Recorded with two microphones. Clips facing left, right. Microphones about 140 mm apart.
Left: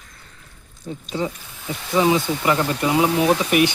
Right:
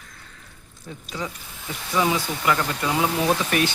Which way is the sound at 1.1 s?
30° left (ahead or behind).